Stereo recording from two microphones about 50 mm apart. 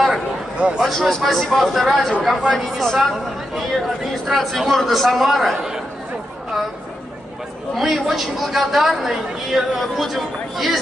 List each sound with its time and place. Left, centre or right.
0.6 s speech: right
0.8 s a woman's voice: centre
7.7 s a woman's voice: centre